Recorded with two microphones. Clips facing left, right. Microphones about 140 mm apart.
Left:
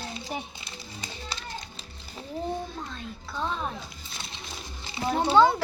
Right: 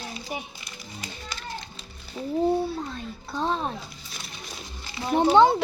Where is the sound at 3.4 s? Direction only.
35° right (ahead or behind).